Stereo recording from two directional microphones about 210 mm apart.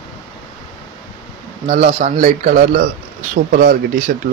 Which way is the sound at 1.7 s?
35° right (ahead or behind).